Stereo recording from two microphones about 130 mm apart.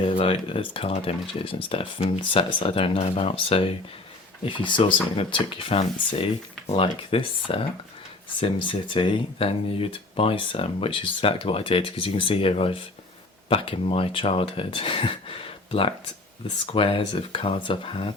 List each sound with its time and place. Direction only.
0.2 s speech: 45° left (ahead or behind)